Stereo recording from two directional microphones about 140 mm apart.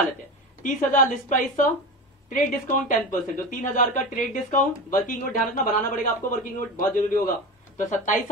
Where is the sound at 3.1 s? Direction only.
70° left (ahead or behind).